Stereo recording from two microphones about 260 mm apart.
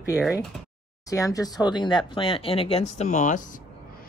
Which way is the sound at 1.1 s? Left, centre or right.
Centre.